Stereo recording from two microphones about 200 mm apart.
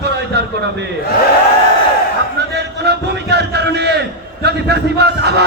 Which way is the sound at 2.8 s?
55° right (ahead or behind).